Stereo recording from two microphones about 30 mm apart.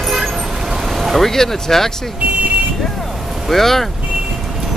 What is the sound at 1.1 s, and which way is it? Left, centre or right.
Speech, centre.